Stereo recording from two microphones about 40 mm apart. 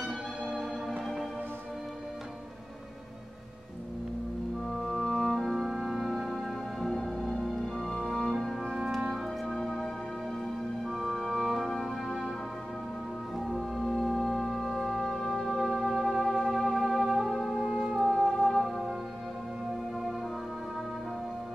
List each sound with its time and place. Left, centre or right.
0.0 s music: centre
4.6 s music: centre
9.6 s music: centre
10.9 s music: centre
13.4 s music: centre
15.1 s music: centre
15.7 s music: centre
18.1 s music: centre